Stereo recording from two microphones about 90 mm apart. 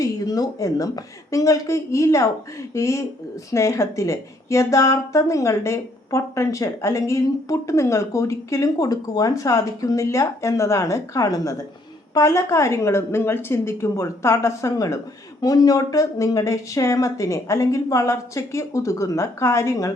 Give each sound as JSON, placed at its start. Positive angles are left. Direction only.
{"t": 0.0, "sound": "a woman's voice", "side_deg": 40}